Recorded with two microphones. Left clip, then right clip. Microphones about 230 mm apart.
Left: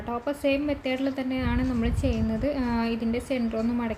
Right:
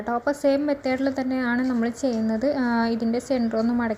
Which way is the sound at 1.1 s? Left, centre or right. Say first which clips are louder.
Right 4 dB; centre.